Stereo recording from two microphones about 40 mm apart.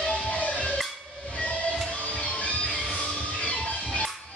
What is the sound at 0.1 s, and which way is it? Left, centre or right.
Music, left.